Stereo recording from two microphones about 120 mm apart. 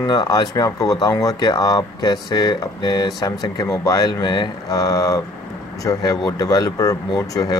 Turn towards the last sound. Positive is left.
turn(degrees=30)  # may be behind; listen again after turning